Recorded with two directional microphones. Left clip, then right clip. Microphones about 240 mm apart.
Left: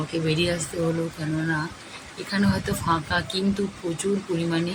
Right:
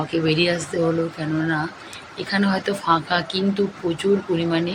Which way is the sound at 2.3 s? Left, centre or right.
Centre.